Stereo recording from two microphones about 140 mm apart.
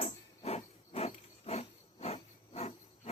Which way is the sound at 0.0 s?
50° left (ahead or behind).